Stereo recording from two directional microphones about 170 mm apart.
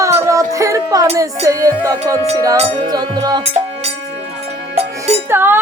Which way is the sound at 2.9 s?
25° right (ahead or behind).